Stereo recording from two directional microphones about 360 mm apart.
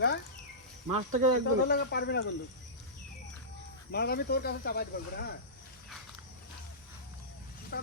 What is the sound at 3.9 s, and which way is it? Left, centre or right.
Speech, left.